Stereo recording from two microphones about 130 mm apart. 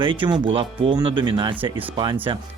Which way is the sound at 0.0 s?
40° right (ahead or behind).